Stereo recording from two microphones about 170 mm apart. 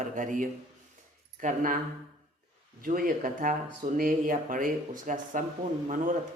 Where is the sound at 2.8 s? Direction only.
55° right (ahead or behind).